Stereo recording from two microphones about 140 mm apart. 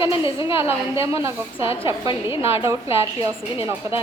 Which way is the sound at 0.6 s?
20° right (ahead or behind).